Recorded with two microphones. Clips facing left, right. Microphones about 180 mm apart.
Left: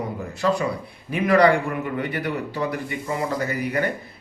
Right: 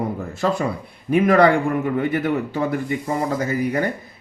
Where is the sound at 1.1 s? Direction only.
50° right (ahead or behind).